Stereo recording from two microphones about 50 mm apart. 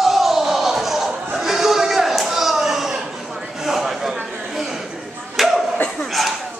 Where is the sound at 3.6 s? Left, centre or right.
Centre.